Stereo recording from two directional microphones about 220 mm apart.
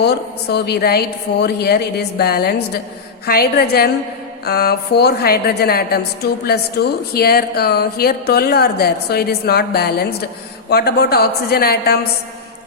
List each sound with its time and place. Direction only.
0.0 s a woman's voice: 50° left (ahead or behind)